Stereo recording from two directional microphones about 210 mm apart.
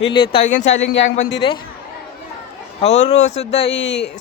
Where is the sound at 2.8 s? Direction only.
30° left (ahead or behind).